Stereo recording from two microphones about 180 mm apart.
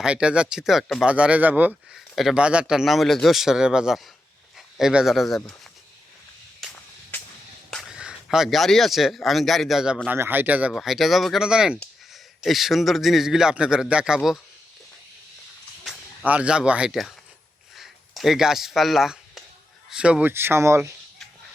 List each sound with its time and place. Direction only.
0.0 s speech: 5° right (ahead or behind)
6.6 s a sound: centre (ahead or behind)
7.7 s a man's voice: centre (ahead or behind)
15.8 s speech: 5° right (ahead or behind)
17.7 s a sound: centre (ahead or behind)
19.9 s speech: 5° right (ahead or behind)